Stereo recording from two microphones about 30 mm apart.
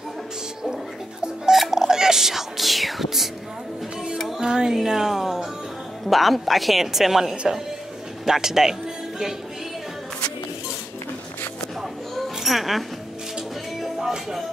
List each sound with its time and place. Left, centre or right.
1.7 s music: centre
4.4 s music: right
4.8 s a sound: centre
6.0 s a woman's voice: centre
12.4 s a woman's voice: centre
13.7 s music: centre